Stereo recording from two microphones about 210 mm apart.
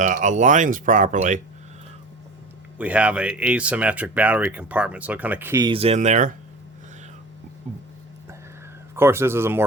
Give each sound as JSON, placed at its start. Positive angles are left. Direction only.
{"t": 0.0, "sound": "speech", "side_deg": -35}
{"t": 2.7, "sound": "speech", "side_deg": -5}
{"t": 9.0, "sound": "speech", "side_deg": -10}